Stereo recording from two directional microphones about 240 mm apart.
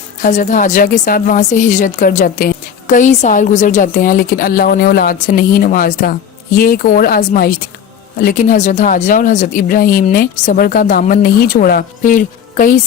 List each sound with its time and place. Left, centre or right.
0.2 s speech: left